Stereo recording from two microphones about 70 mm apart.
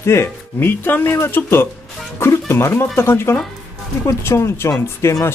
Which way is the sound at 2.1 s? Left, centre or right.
Left.